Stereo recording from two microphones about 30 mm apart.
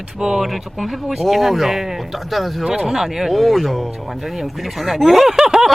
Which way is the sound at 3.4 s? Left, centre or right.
Centre.